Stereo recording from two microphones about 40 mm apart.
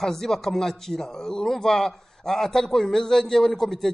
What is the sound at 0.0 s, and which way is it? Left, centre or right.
A man's voice, centre.